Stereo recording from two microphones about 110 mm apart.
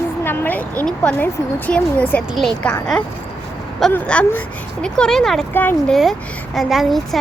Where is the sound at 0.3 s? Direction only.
15° left (ahead or behind).